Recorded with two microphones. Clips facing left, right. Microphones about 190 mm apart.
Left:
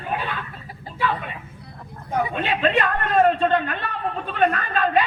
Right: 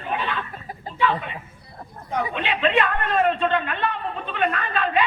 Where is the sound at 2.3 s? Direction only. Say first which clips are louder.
Right 1 dB; 45° left (ahead or behind).